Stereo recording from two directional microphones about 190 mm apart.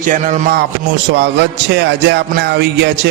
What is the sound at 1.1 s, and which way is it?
Music, 65° right (ahead or behind).